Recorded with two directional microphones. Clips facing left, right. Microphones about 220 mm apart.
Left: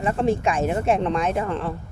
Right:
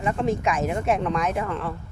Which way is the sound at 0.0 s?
35° left (ahead or behind).